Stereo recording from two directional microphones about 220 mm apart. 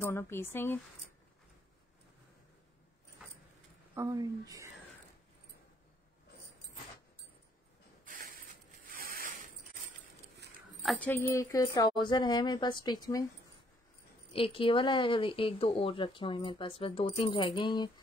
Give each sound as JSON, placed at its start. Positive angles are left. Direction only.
{"t": 0.0, "sound": "speech", "side_deg": 10}
{"t": 3.9, "sound": "speech", "side_deg": -15}
{"t": 8.0, "sound": "mechanisms", "side_deg": -40}
{"t": 8.9, "sound": "a sound", "side_deg": -40}
{"t": 10.8, "sound": "speech", "side_deg": 5}
{"t": 14.3, "sound": "speech", "side_deg": 25}